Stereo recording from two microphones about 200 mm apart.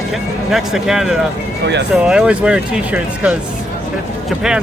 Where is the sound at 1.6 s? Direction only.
60° right (ahead or behind).